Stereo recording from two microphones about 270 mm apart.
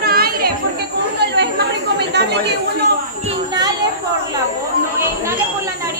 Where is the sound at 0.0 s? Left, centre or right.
Right.